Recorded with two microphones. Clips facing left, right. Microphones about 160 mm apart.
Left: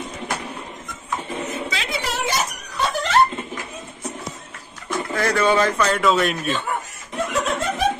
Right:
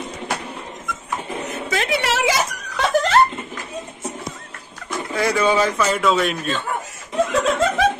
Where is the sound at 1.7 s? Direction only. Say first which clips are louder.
Right 6 dB; 60° right (ahead or behind); by 2.6 s 90° right.